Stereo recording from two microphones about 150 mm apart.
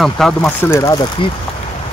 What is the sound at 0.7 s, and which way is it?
Speech, 25° left (ahead or behind).